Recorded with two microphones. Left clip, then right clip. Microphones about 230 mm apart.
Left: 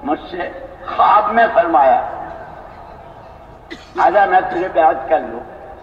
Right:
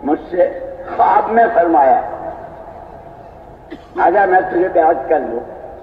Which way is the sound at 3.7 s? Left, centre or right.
Left.